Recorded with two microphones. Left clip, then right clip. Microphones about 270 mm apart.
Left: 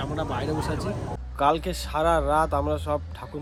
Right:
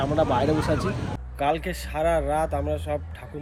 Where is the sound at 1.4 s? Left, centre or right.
Centre.